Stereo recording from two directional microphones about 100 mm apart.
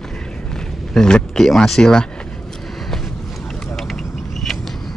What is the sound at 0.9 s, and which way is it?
Speech, 5° left (ahead or behind).